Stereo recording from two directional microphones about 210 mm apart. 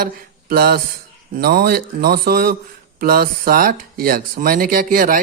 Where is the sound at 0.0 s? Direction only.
45° right (ahead or behind).